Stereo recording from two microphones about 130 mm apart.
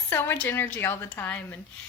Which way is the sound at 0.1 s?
15° left (ahead or behind).